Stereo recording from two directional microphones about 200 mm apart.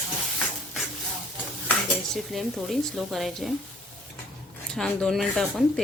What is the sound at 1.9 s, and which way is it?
Speech, centre (ahead or behind).